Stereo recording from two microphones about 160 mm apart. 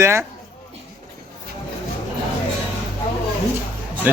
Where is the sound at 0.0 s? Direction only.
15° right (ahead or behind).